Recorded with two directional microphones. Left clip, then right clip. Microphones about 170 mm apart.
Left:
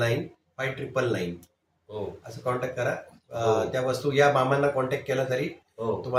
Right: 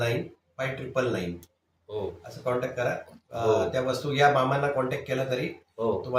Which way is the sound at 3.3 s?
15° left (ahead or behind).